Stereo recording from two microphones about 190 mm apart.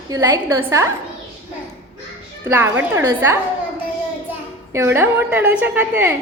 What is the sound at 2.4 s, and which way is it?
Speech, 10° right (ahead or behind).